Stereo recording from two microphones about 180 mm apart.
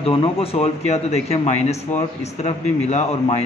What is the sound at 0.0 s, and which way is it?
Speech, 30° left (ahead or behind).